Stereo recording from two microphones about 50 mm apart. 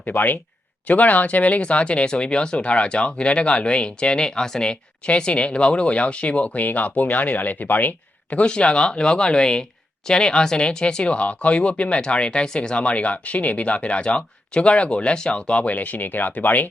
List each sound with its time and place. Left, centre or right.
0.0 s speech: left
8.4 s speech: centre; by 16.6 s left